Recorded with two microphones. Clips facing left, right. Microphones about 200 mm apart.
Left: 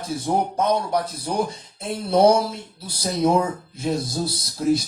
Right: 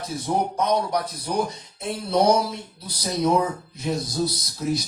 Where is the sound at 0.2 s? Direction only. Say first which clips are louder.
Left 1 dB; 30° left (ahead or behind).